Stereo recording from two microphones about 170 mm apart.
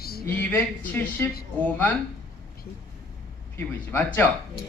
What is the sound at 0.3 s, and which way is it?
Speech, 10° left (ahead or behind).